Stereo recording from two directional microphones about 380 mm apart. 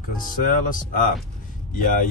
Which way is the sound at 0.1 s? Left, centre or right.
Left.